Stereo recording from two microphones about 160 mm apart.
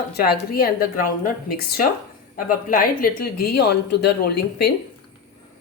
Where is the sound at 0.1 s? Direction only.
70° left (ahead or behind).